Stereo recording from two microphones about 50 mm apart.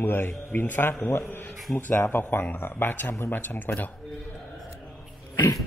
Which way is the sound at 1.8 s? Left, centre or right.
Left.